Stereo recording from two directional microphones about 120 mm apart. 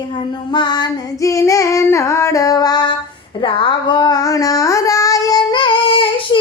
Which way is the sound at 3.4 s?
40° left (ahead or behind).